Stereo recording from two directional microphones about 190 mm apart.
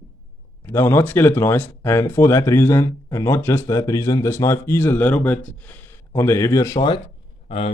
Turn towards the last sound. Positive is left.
turn(degrees=30)  # may be behind; listen again after turning